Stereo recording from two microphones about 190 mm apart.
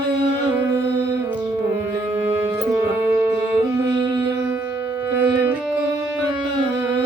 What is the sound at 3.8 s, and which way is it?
Music, 20° right (ahead or behind).